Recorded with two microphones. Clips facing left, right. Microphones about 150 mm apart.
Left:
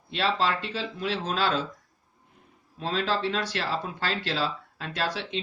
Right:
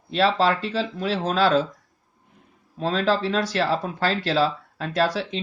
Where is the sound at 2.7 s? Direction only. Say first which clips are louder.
Right 6 dB; 40° right (ahead or behind).